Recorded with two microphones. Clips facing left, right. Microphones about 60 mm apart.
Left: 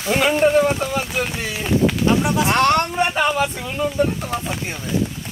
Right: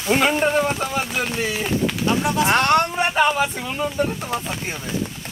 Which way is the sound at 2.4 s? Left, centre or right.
Right.